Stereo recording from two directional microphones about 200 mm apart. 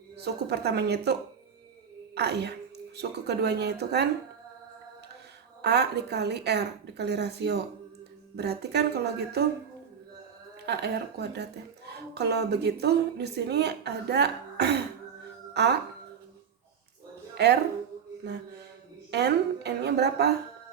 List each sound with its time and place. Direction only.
0.2 s a woman's voice: 55° right (ahead or behind)
2.1 s a woman's voice: 55° right (ahead or behind)
5.6 s a woman's voice: 55° right (ahead or behind)
10.7 s a woman's voice: 55° right (ahead or behind)
17.3 s speech: 55° right (ahead or behind)
19.1 s a woman's voice: 55° right (ahead or behind)